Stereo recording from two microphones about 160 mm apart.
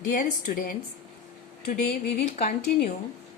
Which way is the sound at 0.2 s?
55° left (ahead or behind).